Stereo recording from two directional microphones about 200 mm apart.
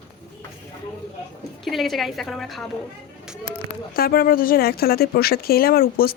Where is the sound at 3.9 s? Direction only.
45° left (ahead or behind).